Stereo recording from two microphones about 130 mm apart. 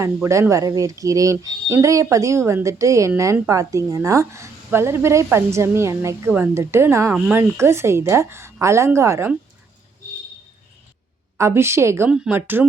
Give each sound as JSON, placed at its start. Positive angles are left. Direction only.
{"t": 0.0, "sound": "speech", "side_deg": -20}
{"t": 11.3, "sound": "speech", "side_deg": -20}